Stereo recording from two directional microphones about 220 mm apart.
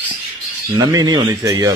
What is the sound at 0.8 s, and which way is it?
Speech, 15° right (ahead or behind).